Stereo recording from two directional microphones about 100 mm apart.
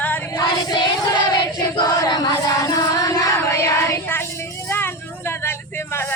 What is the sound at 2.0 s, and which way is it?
Music, 45° left (ahead or behind).